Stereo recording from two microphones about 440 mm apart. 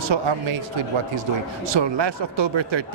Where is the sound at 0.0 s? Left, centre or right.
Right.